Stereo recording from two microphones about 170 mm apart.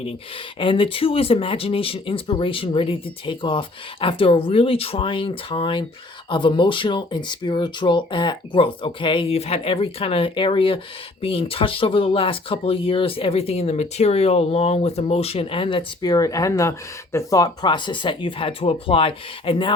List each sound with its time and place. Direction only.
0.6 s speech: 30° left (ahead or behind)